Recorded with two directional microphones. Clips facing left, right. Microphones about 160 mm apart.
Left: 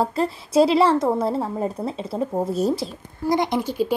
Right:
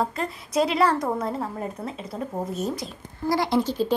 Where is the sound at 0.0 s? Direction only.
35° left (ahead or behind).